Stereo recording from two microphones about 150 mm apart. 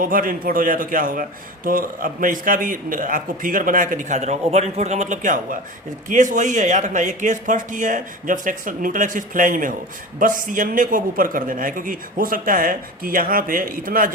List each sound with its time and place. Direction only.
0.0 s a man's voice: 70° right (ahead or behind)